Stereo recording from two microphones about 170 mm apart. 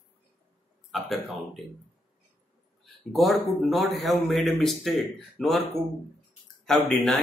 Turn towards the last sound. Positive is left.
turn(degrees=0)  # may be behind; listen again after turning